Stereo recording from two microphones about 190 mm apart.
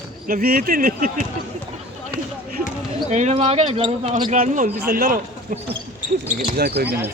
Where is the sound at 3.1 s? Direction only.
40° right (ahead or behind).